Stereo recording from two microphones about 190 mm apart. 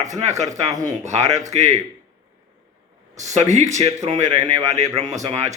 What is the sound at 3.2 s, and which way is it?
Speech, 40° right (ahead or behind).